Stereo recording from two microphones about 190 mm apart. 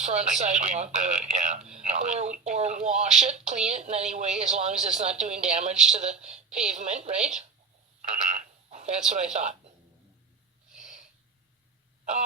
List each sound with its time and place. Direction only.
0.0 s a woman's voice: 35° right (ahead or behind)
8.3 s speech: 40° right (ahead or behind)